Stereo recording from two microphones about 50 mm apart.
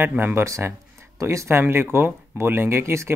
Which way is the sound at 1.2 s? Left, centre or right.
Right.